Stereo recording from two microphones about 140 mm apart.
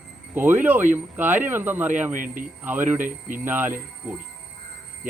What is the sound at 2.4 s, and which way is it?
Speech, 15° right (ahead or behind).